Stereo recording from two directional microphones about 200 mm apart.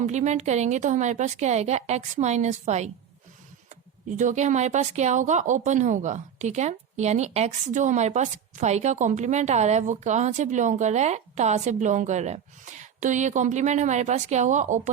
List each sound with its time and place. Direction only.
0.0 s speech: 35° right (ahead or behind)
4.1 s speech: 40° right (ahead or behind)